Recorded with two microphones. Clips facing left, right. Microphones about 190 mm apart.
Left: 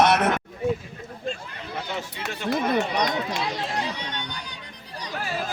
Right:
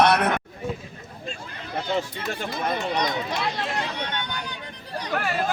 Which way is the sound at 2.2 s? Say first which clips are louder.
Left 3 dB; 75° left (ahead or behind).